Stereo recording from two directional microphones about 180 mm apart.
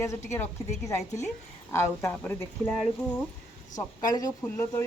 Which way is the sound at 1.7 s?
15° left (ahead or behind).